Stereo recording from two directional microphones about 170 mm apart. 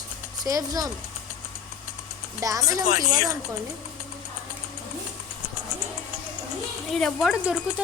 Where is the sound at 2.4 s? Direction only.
20° right (ahead or behind).